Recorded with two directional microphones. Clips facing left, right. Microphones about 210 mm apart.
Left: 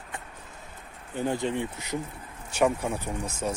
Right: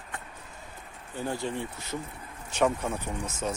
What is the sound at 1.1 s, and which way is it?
Speech, 20° left (ahead or behind).